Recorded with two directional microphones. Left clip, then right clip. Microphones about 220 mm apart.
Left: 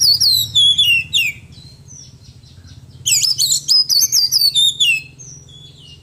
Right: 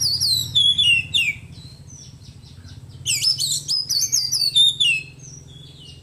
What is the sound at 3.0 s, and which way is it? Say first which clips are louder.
Chirp: left 5 dB; 15° left (ahead or behind).